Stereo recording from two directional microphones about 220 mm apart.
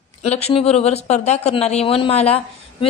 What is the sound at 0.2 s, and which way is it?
Speech, 30° left (ahead or behind).